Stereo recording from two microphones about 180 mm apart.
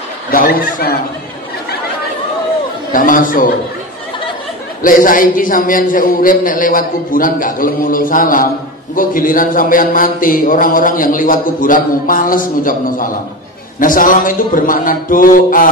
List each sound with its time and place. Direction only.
0.3 s a man's voice: 55° left (ahead or behind)
2.9 s a man's voice: 50° left (ahead or behind)
4.8 s a man's voice: 50° left (ahead or behind)